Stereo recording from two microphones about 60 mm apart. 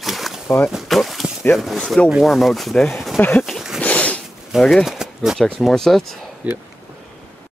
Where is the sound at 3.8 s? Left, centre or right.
Left.